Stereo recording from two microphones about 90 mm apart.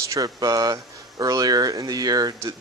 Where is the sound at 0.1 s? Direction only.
45° right (ahead or behind).